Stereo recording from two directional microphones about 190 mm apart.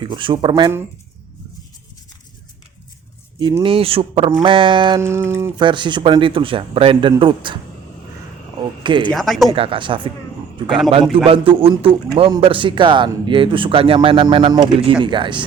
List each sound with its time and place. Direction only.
0.0 s a man's voice: 25° right (ahead or behind)
3.4 s a man's voice: 25° right (ahead or behind)
4.9 s a sound: 15° right (ahead or behind)
5.5 s a man's voice: 25° right (ahead or behind)
8.8 s speech: 25° right (ahead or behind)
9.0 s speech: centre (ahead or behind)
9.5 s a man's voice: 30° right (ahead or behind)
10.7 s speech: centre (ahead or behind)
11.3 s a man's voice: 30° right (ahead or behind)